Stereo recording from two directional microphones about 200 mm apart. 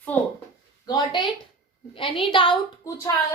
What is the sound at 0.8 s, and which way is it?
A woman's voice, 20° left (ahead or behind).